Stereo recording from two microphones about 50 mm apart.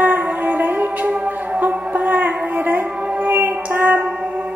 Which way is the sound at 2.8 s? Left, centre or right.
Right.